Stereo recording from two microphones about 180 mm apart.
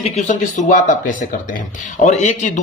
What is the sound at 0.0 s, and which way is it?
A man's voice, 45° left (ahead or behind).